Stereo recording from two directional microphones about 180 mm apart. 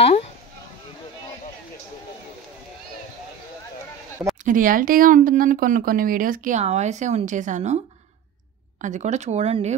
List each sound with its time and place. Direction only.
4.5 s speech: 50° right (ahead or behind)
6.6 s speech: 40° right (ahead or behind)
8.8 s speech: 40° right (ahead or behind)